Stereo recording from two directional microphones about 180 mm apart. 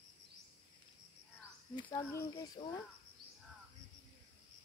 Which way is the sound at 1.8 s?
25° left (ahead or behind).